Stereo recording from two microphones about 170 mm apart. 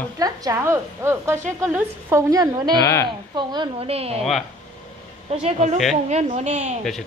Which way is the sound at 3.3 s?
25° right (ahead or behind).